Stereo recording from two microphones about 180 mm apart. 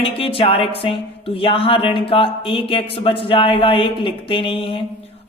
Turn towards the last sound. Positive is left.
turn(degrees=30)  # may be behind; listen again after turning